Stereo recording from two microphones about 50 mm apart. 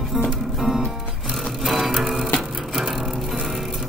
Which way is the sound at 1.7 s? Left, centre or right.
Centre.